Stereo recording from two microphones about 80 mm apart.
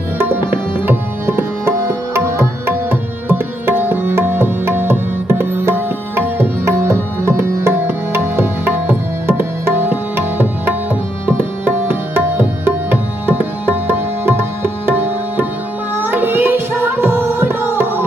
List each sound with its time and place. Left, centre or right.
0.2 s tabla: right
11.3 s music: right